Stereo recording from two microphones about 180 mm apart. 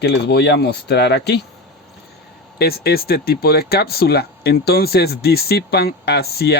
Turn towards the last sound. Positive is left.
turn(degrees=60)  # may be behind; listen again after turning